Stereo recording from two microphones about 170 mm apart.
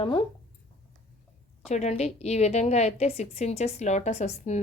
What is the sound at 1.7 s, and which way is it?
A woman's voice, 40° left (ahead or behind).